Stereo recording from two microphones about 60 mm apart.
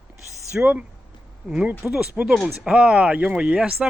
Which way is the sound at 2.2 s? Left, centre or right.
Centre.